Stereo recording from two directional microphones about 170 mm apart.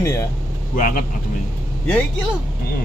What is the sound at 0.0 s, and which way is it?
Speech, 20° left (ahead or behind).